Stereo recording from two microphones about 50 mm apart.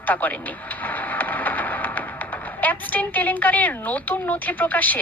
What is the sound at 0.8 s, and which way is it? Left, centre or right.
Music, left.